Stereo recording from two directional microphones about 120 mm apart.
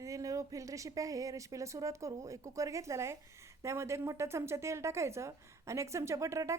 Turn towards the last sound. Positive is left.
turn(degrees=-25)  # may be behind; listen again after turning